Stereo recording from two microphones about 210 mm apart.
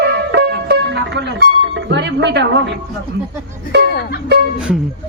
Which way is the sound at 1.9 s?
55° right (ahead or behind).